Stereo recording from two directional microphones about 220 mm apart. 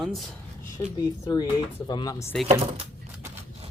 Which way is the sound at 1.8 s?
20° left (ahead or behind).